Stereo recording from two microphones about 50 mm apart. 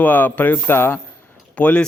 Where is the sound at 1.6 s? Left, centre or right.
Left.